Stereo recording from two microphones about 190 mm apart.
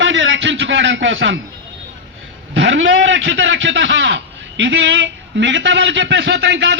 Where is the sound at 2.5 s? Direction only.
80° right.